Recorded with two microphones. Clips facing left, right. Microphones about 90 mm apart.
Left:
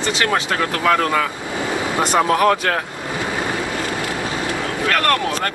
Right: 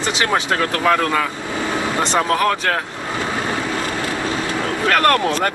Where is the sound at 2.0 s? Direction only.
10° left (ahead or behind).